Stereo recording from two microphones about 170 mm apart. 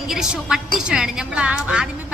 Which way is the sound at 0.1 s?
5° right (ahead or behind).